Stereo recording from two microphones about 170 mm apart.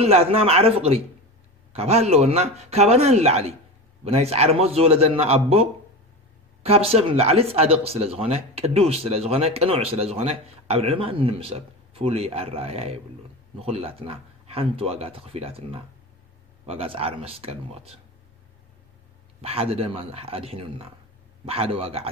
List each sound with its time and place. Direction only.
0.0 s speech: 35° right (ahead or behind)
19.4 s speech: 35° right (ahead or behind)